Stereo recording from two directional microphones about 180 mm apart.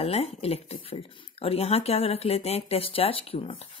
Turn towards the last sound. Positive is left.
turn(degrees=35)  # may be behind; listen again after turning